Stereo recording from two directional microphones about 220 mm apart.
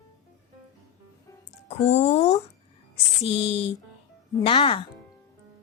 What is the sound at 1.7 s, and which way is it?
Speech, 30° left (ahead or behind).